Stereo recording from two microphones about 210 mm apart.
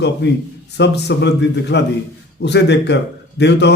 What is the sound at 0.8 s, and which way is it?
A man's voice, 55° left (ahead or behind).